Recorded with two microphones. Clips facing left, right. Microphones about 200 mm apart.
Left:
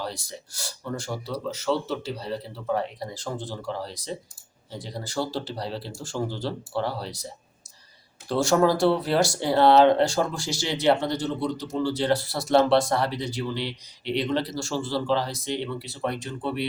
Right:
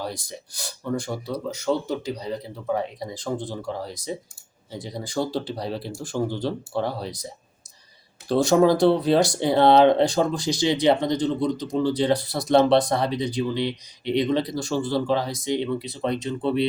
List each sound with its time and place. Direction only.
0.0 s speech: 15° right (ahead or behind)
8.3 s speech: 15° right (ahead or behind)